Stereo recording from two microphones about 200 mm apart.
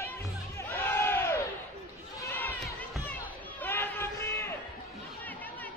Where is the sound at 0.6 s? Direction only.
10° left (ahead or behind).